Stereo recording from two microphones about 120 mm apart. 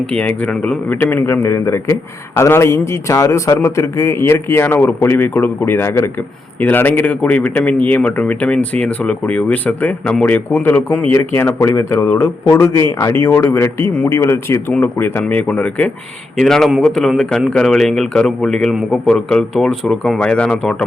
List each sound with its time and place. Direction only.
0.0 s a man's voice: 10° left (ahead or behind)
0.9 s a man's voice: 20° left (ahead or behind)